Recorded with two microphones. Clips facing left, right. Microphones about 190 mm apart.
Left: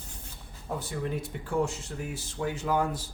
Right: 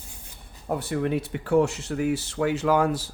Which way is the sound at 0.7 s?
65° right (ahead or behind).